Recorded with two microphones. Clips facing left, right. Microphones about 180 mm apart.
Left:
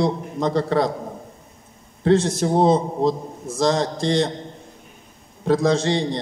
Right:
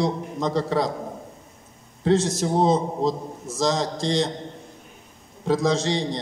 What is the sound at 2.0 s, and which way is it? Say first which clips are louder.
A man's voice: left 3 dB; 60° left (ahead or behind).